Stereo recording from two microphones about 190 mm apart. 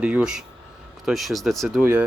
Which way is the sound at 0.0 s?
5° right (ahead or behind).